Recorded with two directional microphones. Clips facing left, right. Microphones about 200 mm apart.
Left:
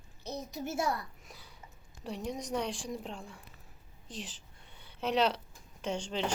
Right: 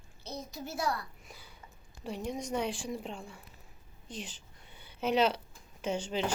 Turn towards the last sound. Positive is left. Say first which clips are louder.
# right 2 dB
turn(degrees=-5)  # may be behind; listen again after turning